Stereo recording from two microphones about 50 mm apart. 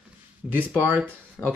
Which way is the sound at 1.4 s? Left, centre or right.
Left.